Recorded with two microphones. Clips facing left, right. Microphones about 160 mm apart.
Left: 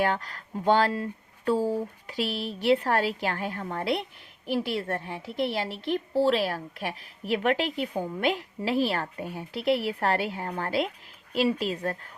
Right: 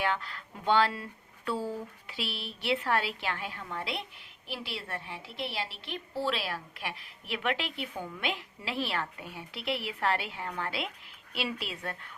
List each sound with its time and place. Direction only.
0.0 s a woman's voice: 40° left (ahead or behind)